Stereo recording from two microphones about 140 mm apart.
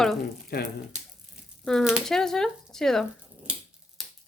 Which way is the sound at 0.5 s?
90° left.